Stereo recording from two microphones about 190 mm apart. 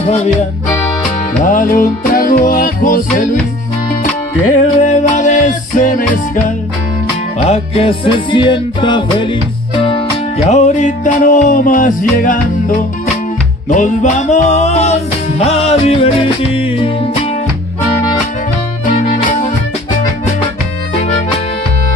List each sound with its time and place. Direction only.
1.4 s music: 45° left (ahead or behind)
4.8 s music: 40° left (ahead or behind)
7.3 s music: 30° left (ahead or behind)
10.4 s music: 35° left (ahead or behind)
18.9 s music: 45° left (ahead or behind)